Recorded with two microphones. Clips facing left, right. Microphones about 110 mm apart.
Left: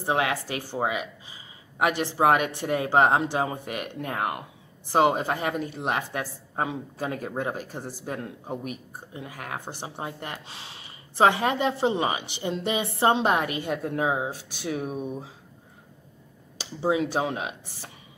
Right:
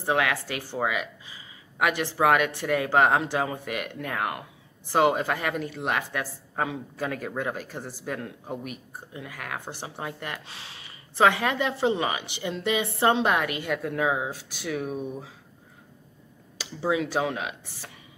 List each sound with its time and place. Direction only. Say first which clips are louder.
0.0 s speech: even; 25° left (ahead or behind)
16.5 s speech: left 2 dB; 30° left (ahead or behind)